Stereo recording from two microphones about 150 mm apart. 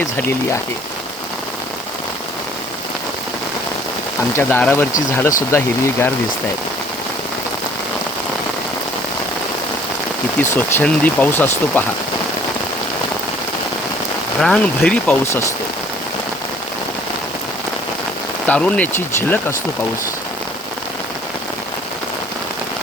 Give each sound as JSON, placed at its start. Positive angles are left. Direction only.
{"t": 0.2, "sound": "speech", "side_deg": 15}
{"t": 4.4, "sound": "speech", "side_deg": 10}
{"t": 10.4, "sound": "speech", "side_deg": 15}
{"t": 14.4, "sound": "speech", "side_deg": 5}
{"t": 18.4, "sound": "speech", "side_deg": 10}